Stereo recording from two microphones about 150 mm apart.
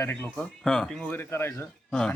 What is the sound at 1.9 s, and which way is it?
Speech, 5° left (ahead or behind).